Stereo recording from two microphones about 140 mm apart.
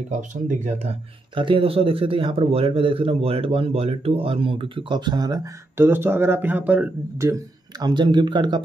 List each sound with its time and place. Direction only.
0.3 s speech: 60° right (ahead or behind)
1.3 s a man's voice: 40° right (ahead or behind); by 7.3 s 15° right (ahead or behind)
7.8 s a man's voice: 30° right (ahead or behind)